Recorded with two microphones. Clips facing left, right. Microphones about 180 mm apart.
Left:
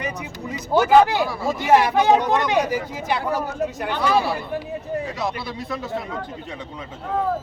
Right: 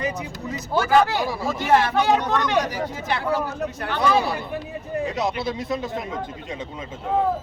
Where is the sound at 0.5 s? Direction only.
15° left (ahead or behind).